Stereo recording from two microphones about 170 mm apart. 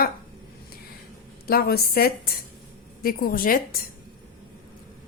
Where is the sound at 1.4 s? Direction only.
65° left (ahead or behind).